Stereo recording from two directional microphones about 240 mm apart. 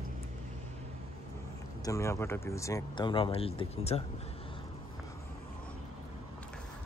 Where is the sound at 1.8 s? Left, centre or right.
Centre.